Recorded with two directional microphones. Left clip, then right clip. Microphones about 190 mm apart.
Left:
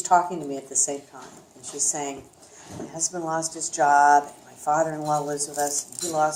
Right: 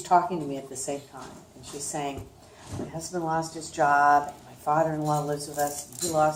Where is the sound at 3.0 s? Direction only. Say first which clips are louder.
Left 1 dB; 45° left (ahead or behind).